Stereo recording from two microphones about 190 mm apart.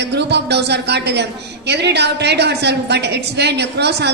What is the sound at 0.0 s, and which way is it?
A woman's voice, 60° right (ahead or behind).